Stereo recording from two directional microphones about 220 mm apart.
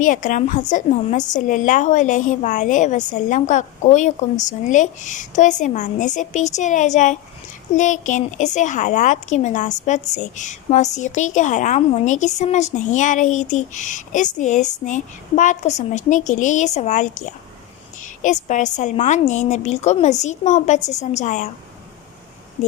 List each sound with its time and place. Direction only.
0.0 s a woman's voice: 35° left (ahead or behind)